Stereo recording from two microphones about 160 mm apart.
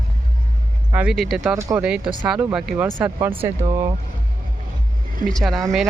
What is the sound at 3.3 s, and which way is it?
Speech, 35° right (ahead or behind).